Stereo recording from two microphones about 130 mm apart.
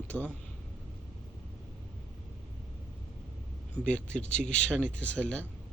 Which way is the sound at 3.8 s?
10° left (ahead or behind).